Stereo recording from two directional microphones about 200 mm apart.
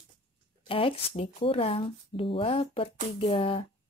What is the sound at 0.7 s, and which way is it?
Speech, 25° left (ahead or behind).